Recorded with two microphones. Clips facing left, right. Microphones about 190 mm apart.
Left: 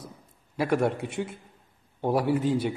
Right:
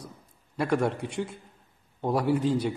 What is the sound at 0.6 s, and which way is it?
A man's voice, 5° left (ahead or behind).